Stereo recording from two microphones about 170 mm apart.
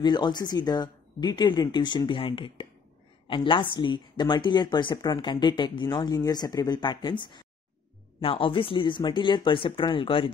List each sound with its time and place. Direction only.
0.0 s speech: 25° left (ahead or behind)